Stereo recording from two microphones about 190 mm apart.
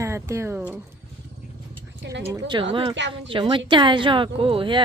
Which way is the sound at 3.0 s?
70° right (ahead or behind).